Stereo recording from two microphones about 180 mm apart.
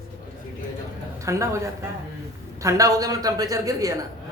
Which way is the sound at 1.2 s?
15° right (ahead or behind).